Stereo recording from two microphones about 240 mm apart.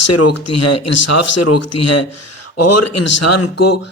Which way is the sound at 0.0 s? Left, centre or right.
Left.